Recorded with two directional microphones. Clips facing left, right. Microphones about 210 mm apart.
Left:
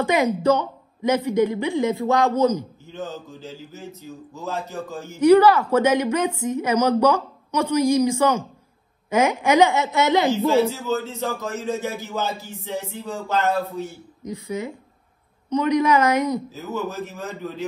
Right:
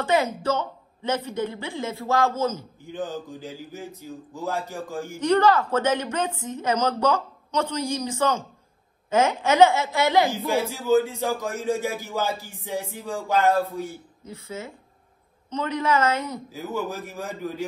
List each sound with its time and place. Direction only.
0.0 s a woman's voice: 15° left (ahead or behind)
2.8 s speech: 15° right (ahead or behind)
5.2 s a woman's voice: 10° left (ahead or behind)
10.3 s speech: 15° right (ahead or behind)
14.2 s a woman's voice: 15° left (ahead or behind)
16.7 s speech: 15° right (ahead or behind)